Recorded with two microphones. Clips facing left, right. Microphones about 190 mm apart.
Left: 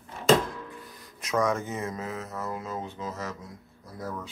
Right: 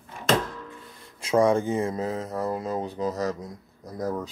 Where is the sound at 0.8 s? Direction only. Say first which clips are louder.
Right 1 dB; 30° right (ahead or behind).